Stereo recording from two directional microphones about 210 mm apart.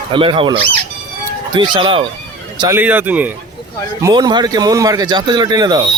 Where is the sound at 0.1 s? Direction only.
25° right (ahead or behind).